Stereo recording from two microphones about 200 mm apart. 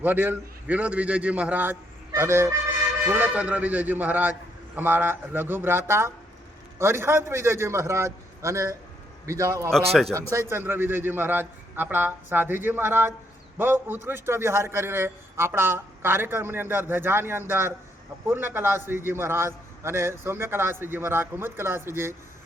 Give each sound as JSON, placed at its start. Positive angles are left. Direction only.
{"t": 0.0, "sound": "a man's voice", "side_deg": -10}
{"t": 2.1, "sound": "fowl", "side_deg": -15}
{"t": 3.1, "sound": "a man's voice", "side_deg": -5}